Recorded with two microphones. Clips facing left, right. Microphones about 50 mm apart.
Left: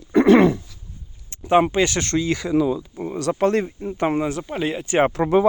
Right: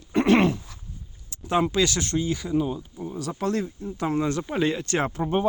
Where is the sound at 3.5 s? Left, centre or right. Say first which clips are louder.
Left 6 dB; left.